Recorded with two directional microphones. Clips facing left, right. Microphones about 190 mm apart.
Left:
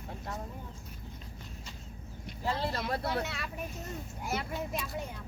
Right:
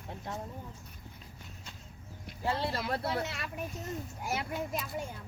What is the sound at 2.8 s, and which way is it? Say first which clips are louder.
Speech: even; centre (ahead or behind).